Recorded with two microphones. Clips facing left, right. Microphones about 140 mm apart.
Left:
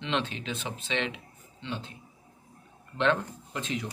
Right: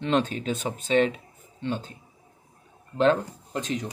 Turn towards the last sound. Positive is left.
turn(degrees=-40)  # may be behind; listen again after turning